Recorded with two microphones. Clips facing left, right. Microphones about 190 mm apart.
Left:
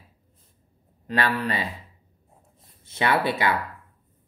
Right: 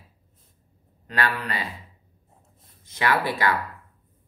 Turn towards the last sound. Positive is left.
turn(degrees=20)  # may be behind; listen again after turning